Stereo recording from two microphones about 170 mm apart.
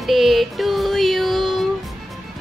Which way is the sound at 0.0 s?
Centre (ahead or behind).